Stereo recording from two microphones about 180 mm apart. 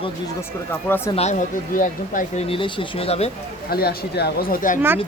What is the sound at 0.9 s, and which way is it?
Speech, 10° left (ahead or behind).